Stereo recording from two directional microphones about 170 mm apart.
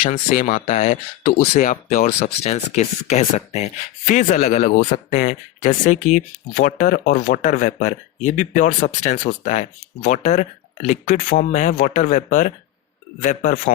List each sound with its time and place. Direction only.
0.0 s speech: 50° left (ahead or behind)